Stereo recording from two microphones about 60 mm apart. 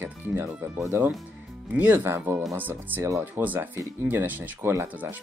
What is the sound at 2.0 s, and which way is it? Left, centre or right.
Speech, right.